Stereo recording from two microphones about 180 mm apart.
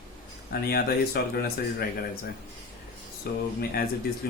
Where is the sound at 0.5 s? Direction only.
55° left (ahead or behind).